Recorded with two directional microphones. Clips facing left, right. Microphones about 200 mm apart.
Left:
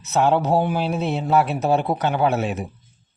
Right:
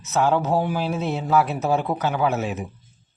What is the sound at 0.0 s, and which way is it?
A man's voice, 30° left (ahead or behind).